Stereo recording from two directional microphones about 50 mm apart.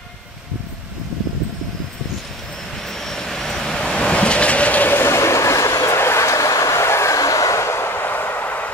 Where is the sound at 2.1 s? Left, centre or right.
Centre; by 4.9 s left.